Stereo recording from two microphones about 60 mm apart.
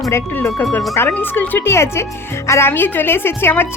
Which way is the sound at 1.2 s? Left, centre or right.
Left.